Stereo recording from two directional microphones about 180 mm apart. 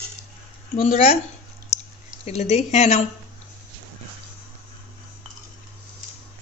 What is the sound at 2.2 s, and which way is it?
Speech, 40° left (ahead or behind).